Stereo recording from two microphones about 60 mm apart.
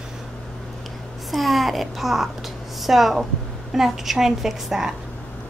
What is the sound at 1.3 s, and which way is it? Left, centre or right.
A child's voice, centre.